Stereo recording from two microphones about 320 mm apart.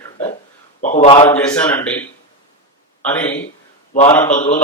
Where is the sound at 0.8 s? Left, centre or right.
Left; by 2.0 s centre.